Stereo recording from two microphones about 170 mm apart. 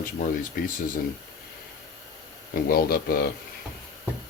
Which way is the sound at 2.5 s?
60° left (ahead or behind).